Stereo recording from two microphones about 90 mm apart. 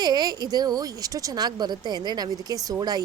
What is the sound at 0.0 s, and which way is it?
Speech, 50° right (ahead or behind).